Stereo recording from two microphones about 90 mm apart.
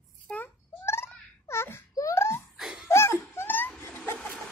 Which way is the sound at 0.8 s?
30° left (ahead or behind).